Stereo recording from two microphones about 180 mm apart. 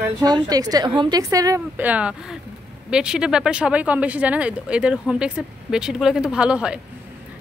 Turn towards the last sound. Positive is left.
turn(degrees=-5)  # may be behind; listen again after turning